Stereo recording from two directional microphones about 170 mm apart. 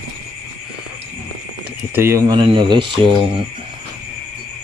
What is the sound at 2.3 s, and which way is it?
Speech, 30° right (ahead or behind).